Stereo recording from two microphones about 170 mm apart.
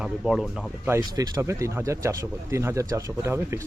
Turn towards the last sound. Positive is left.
turn(degrees=-15)  # may be behind; listen again after turning